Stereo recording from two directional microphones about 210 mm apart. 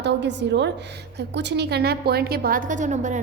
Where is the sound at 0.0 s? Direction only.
55° right (ahead or behind).